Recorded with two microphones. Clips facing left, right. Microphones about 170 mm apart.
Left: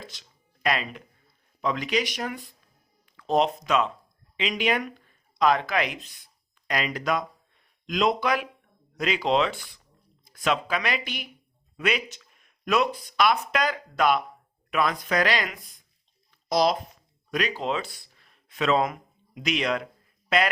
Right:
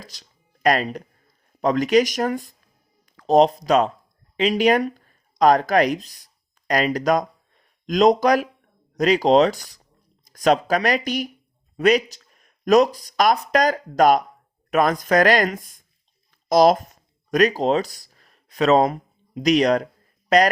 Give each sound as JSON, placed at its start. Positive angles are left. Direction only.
{"t": 0.0, "sound": "music", "side_deg": -40}
{"t": 1.6, "sound": "speech", "side_deg": -45}